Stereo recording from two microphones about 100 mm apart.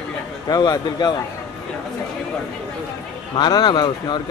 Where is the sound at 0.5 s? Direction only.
40° left (ahead or behind).